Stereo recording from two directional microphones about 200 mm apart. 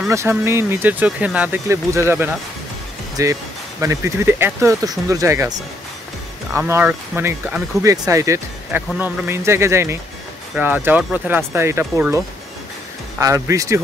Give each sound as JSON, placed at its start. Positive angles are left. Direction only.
{"t": 0.1, "sound": "speech", "side_deg": -15}
{"t": 6.5, "sound": "speech", "side_deg": -10}
{"t": 13.2, "sound": "speech", "side_deg": -15}